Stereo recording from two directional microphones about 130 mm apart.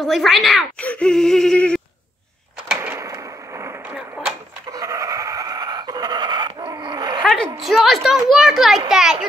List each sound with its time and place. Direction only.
0.0 s a child's voice: centre (ahead or behind)
0.7 s a sound: 10° left (ahead or behind)
2.8 s arrow: 20° right (ahead or behind)
4.6 s dog: 25° right (ahead or behind)
7.6 s a child's voice: centre (ahead or behind)